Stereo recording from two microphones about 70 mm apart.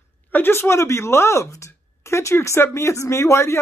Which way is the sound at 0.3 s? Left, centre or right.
Left.